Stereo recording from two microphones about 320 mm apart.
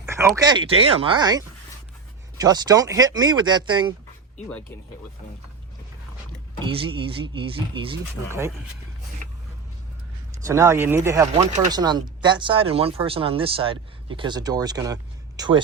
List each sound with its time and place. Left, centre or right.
0.0 s speech: centre
6.6 s speech: centre
10.4 s speech: centre